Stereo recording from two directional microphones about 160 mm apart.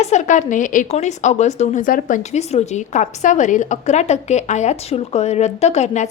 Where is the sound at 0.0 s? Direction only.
45° left (ahead or behind).